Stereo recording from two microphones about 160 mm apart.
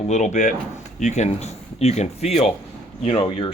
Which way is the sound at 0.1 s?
50° left (ahead or behind).